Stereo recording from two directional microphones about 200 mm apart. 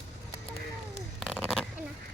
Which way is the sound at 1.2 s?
Centre (ahead or behind).